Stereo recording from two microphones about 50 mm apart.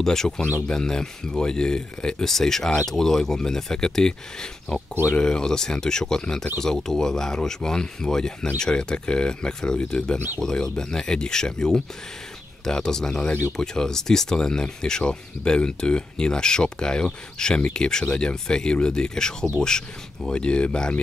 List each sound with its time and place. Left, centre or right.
0.0 s speech: centre